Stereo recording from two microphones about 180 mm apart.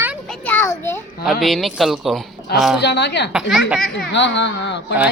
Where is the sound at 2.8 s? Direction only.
70° left (ahead or behind).